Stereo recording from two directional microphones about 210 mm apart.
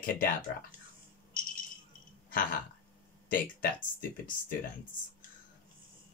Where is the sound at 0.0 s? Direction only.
45° left (ahead or behind).